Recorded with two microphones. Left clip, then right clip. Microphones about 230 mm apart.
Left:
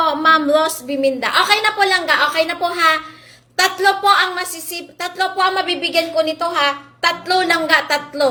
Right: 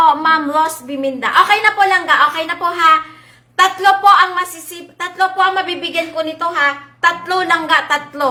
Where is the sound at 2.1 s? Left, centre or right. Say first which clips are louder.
Right 2 dB; centre.